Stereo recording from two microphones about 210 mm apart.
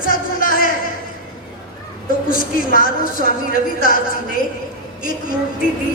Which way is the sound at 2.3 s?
40° left (ahead or behind).